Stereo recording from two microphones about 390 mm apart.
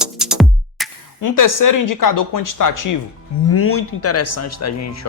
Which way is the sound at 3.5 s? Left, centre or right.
Left.